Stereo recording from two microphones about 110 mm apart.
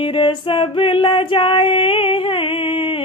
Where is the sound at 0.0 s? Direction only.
50° left (ahead or behind).